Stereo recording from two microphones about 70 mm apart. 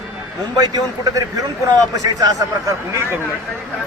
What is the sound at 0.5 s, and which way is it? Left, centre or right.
Speech, right.